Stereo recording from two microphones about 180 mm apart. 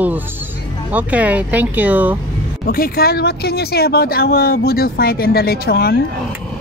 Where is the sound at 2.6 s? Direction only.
55° left (ahead or behind).